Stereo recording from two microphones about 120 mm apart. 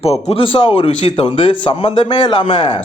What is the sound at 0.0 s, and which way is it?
A man's voice, 55° left (ahead or behind).